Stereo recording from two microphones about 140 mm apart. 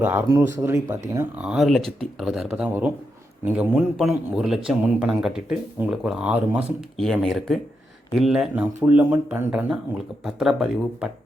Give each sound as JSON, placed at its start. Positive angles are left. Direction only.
{"t": 0.0, "sound": "speech", "side_deg": -15}
{"t": 1.4, "sound": "speech", "side_deg": -5}